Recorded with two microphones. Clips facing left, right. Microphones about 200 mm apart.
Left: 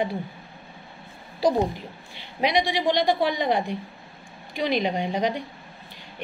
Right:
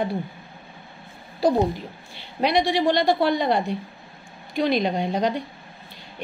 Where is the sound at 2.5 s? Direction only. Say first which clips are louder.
Right 3 dB; 15° left (ahead or behind).